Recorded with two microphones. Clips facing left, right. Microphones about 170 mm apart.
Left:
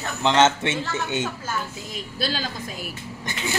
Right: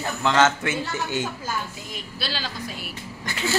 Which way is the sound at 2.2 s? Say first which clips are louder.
Left 4 dB; 45° left (ahead or behind).